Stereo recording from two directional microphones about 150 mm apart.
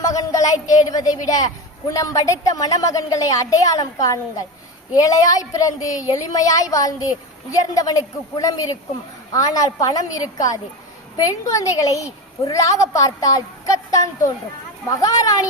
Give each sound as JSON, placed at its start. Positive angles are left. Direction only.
{"t": 0.1, "sound": "a woman's voice", "side_deg": 25}